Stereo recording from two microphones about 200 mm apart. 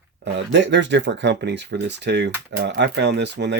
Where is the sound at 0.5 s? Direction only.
60° right (ahead or behind).